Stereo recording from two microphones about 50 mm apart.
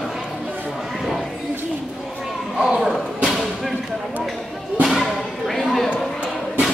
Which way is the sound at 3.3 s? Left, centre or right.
Centre.